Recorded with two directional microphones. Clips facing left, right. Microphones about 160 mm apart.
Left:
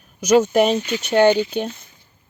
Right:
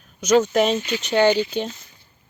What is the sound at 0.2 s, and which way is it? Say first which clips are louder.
Speech: left 2 dB; 10° left (ahead or behind).